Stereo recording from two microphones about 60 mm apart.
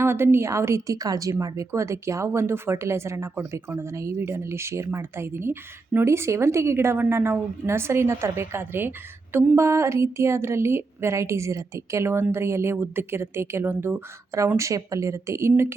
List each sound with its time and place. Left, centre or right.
0.0 s a woman's voice: right